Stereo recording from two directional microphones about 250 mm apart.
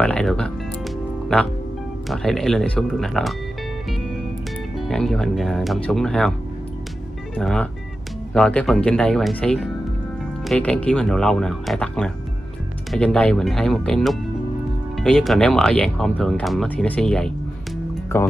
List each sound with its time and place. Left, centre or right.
0.0 s speech: centre
2.0 s speech: centre
4.7 s speech: centre
7.3 s speech: centre